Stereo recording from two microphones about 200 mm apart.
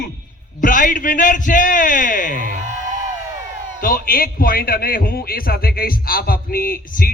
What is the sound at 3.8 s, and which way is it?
A man's voice, 45° left (ahead or behind).